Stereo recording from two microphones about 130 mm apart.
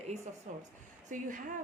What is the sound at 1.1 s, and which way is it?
Speech, 85° right.